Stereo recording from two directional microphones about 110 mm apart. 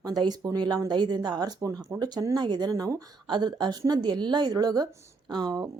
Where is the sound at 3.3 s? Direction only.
40° right (ahead or behind).